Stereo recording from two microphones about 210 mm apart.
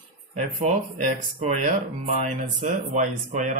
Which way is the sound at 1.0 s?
35° right (ahead or behind).